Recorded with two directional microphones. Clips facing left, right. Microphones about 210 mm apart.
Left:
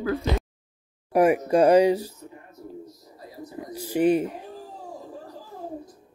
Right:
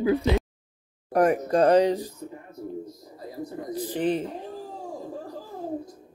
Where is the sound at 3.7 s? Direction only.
10° left (ahead or behind).